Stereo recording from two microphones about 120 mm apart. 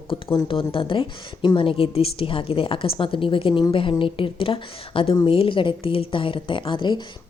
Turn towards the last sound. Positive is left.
turn(degrees=40)  # may be behind; listen again after turning